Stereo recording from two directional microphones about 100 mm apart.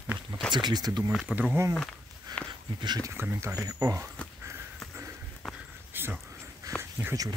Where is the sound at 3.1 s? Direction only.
25° right (ahead or behind).